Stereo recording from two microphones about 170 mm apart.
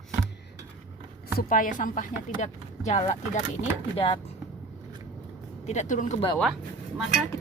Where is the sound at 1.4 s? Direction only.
55° left (ahead or behind).